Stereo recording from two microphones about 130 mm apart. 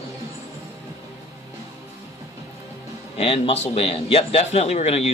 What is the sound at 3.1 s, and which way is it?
Speech, 50° left (ahead or behind).